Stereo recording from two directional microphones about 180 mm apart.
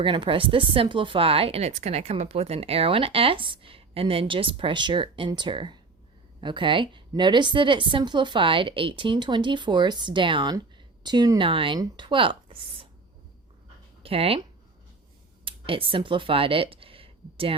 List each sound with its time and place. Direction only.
0.0 s speech: 25° right (ahead or behind)
14.0 s speech: 30° right (ahead or behind)
15.4 s speech: 30° right (ahead or behind)